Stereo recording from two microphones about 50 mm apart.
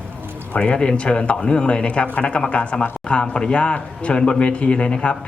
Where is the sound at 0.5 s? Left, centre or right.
Left.